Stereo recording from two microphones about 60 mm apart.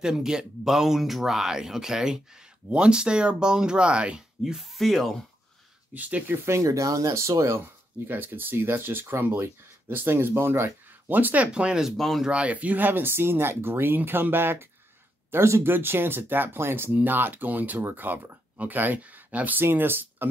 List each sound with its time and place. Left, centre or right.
0.0 s speech: centre
4.4 s speech: centre
5.9 s speech: right
6.6 s speech: right
8.1 s speech: right
11.1 s speech: right; by 11.9 s centre
12.0 s speech: centre
12.3 s speech: right